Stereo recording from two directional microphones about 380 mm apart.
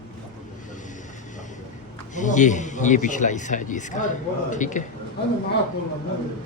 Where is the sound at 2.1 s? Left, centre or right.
Centre.